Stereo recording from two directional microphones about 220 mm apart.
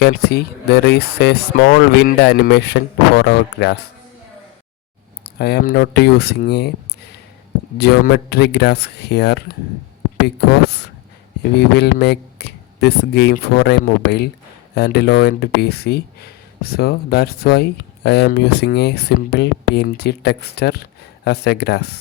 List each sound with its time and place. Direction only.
0.0 s speech: 45° left (ahead or behind)
5.2 s speech: 45° left (ahead or behind)